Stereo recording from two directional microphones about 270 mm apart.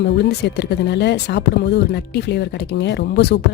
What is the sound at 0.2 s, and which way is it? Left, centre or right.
Speech, left.